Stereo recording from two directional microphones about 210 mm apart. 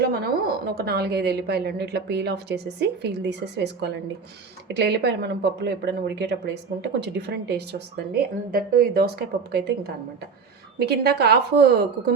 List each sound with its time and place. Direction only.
0.1 s a woman's voice: 45° right (ahead or behind)